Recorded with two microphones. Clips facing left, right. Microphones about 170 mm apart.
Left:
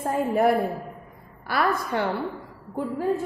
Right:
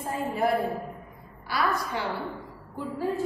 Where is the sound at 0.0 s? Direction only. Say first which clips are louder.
Left 6 dB; 55° left (ahead or behind).